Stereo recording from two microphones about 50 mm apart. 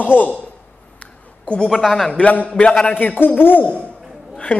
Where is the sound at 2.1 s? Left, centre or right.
Left.